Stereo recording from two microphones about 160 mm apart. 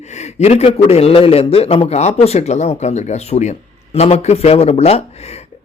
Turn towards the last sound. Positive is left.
turn(degrees=40)  # may be behind; listen again after turning